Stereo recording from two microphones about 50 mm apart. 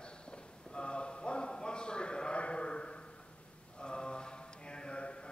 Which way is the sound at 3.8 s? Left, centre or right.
Centre.